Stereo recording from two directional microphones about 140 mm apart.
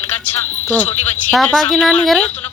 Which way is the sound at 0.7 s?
10° left (ahead or behind).